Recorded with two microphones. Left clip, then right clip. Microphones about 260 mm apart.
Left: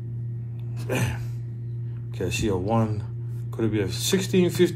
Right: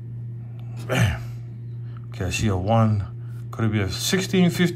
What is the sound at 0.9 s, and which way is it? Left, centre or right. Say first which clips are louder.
Speech: right 4 dB; right.